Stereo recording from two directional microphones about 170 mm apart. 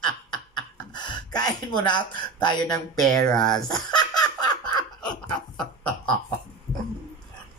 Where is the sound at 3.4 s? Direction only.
25° left (ahead or behind).